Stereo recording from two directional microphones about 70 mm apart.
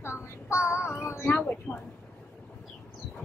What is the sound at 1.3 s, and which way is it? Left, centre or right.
Speech, centre.